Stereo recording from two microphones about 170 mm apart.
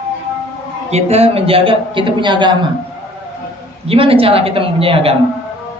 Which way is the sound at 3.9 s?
35° right (ahead or behind).